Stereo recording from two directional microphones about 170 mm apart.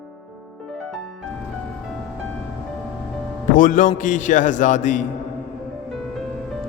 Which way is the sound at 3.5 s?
50° left (ahead or behind).